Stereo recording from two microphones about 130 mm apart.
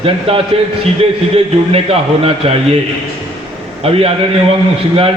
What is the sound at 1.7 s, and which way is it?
Speech, 45° right (ahead or behind).